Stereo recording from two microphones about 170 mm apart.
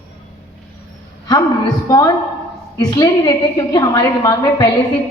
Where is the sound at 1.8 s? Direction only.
20° left (ahead or behind).